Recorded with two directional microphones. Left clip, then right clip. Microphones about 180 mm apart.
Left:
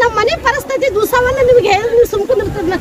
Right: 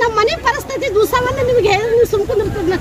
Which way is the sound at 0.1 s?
Centre (ahead or behind).